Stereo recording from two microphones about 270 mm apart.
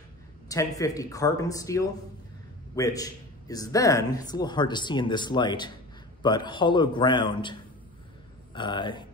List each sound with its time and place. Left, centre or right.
0.5 s speech: centre
8.5 s speech: centre